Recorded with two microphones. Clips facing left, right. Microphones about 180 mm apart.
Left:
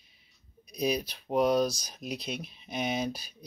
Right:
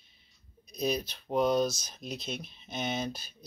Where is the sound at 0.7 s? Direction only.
10° left (ahead or behind).